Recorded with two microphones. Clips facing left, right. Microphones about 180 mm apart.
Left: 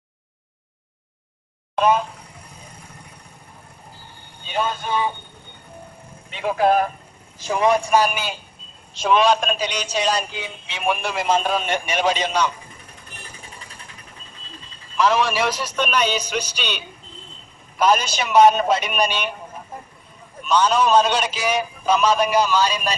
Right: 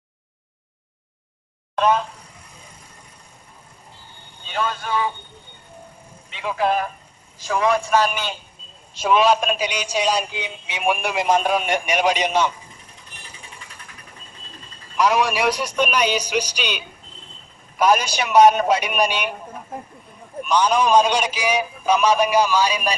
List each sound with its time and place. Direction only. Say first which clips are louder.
4.5 s a man's voice: left 1 dB; 20° left (ahead or behind)
6.4 s a man's voice: left 3 dB; 45° left (ahead or behind)
7.3 s a man's voice: left 1 dB; 20° left (ahead or behind)
8.9 s a man's voice: even; 5° right (ahead or behind)
15.0 s a man's voice: even; 15° right (ahead or behind)
20.4 s a man's voice: even; 10° right (ahead or behind)